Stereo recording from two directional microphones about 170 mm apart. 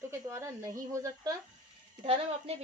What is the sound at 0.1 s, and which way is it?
Speech, 15° right (ahead or behind).